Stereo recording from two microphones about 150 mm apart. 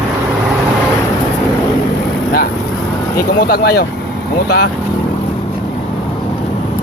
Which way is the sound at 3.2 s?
90° left.